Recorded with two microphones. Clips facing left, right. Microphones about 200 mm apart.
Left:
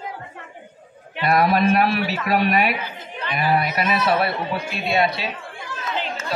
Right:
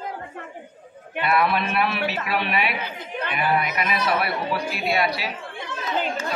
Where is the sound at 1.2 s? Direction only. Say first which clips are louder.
Left 4 dB; 40° left (ahead or behind).